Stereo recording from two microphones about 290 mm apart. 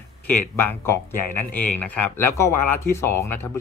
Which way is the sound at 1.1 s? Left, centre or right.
Left.